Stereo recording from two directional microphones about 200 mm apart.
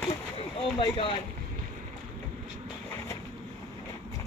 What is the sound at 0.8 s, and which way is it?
Speech, 25° left (ahead or behind).